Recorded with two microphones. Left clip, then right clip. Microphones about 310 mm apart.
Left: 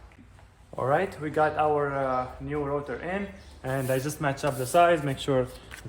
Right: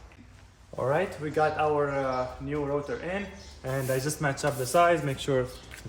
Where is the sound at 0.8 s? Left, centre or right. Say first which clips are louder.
Left 2 dB; centre.